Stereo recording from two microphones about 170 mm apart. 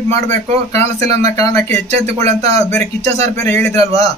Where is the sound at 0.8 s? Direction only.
40° right (ahead or behind).